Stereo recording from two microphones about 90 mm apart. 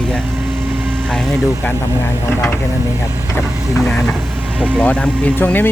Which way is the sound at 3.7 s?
5° left (ahead or behind).